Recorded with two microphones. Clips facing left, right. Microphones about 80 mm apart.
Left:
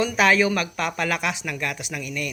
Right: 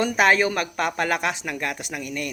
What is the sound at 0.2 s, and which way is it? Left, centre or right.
Speech, right.